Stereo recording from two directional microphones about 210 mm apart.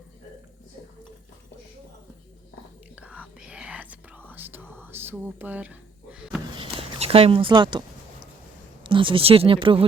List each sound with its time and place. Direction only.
2.9 s whispering: 5° right (ahead or behind)
6.6 s a sound: 25° right (ahead or behind)
8.8 s speech: 25° right (ahead or behind)